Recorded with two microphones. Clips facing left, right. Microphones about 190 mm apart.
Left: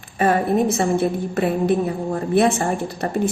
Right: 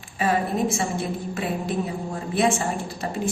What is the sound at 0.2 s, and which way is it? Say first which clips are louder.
Speech: left 5 dB; 55° left (ahead or behind).